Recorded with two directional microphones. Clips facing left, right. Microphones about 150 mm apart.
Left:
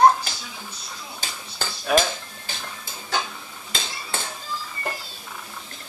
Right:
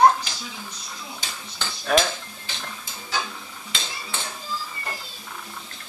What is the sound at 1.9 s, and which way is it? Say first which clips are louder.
Speech: left 1 dB; 5° left (ahead or behind).